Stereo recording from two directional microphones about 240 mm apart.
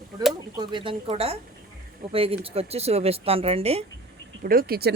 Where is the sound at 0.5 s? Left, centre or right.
Centre.